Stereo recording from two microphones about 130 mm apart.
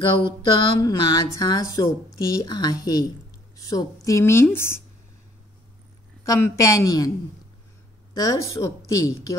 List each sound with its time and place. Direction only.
0.0 s a sound: 40° left (ahead or behind)
0.7 s speech: 35° left (ahead or behind)
6.2 s speech: 25° left (ahead or behind)
8.1 s speech: 25° left (ahead or behind)